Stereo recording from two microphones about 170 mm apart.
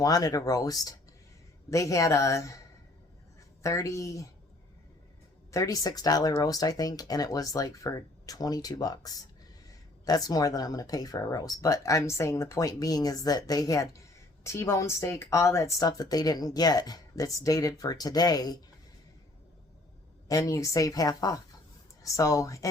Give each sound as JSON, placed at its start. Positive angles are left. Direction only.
{"t": 0.0, "sound": "speech", "side_deg": 20}
{"t": 3.6, "sound": "speech", "side_deg": 20}
{"t": 5.5, "sound": "speech", "side_deg": 20}
{"t": 20.2, "sound": "speech", "side_deg": 20}